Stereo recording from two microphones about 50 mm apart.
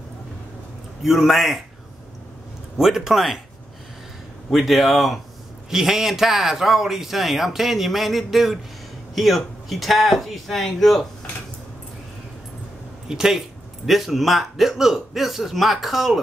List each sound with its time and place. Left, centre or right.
1.0 s a man's voice: centre
2.8 s speech: centre
4.5 s a man's voice: centre
13.1 s a man's voice: centre